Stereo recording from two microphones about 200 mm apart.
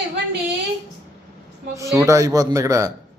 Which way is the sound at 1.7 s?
15° right (ahead or behind).